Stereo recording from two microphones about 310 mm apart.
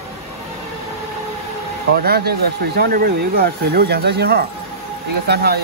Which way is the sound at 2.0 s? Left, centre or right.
Right.